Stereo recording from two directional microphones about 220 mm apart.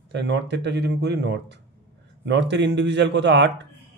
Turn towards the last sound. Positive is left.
turn(degrees=-50)  # may be behind; listen again after turning